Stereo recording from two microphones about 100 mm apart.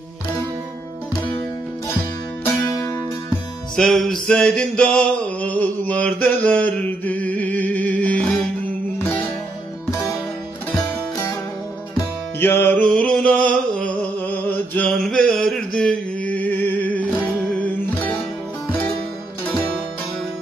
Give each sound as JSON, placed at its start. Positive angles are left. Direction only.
{"t": 3.7, "sound": "music", "side_deg": 5}
{"t": 10.8, "sound": "music", "side_deg": 35}
{"t": 12.4, "sound": "music", "side_deg": 20}
{"t": 14.9, "sound": "a sound", "side_deg": 5}
{"t": 17.6, "sound": "music", "side_deg": 20}